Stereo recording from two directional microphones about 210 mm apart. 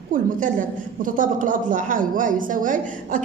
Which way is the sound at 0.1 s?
40° right (ahead or behind).